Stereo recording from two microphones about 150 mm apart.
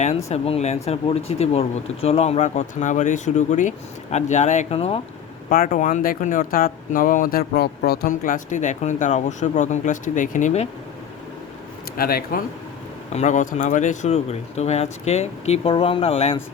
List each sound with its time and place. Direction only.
0.3 s speech: 45° left (ahead or behind)
5.5 s speech: 65° left (ahead or behind); by 10.7 s 50° left (ahead or behind)
11.9 s speech: 80° left
13.1 s speech: 55° left (ahead or behind)